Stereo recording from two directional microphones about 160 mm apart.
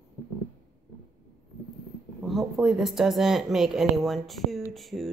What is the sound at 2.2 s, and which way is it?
Speech, centre (ahead or behind).